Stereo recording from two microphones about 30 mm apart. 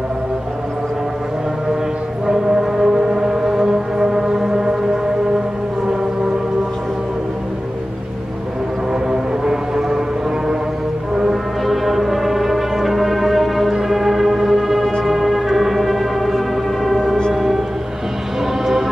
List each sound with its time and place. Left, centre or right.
2.2 s music: centre
9.1 s music: right
11.6 s music: centre